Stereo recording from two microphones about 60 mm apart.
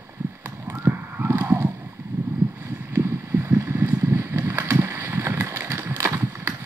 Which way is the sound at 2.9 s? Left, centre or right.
Right.